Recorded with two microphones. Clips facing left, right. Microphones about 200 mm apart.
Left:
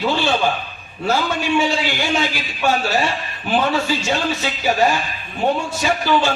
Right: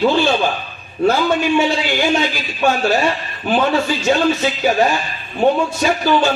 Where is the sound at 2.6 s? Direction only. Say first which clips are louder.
Right 3 dB; 50° right (ahead or behind).